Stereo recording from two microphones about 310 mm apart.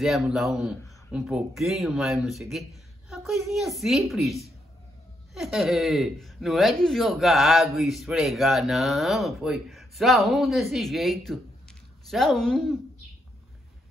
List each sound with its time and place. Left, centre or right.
0.0 s speech: centre